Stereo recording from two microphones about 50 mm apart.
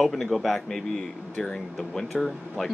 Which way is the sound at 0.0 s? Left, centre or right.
Centre.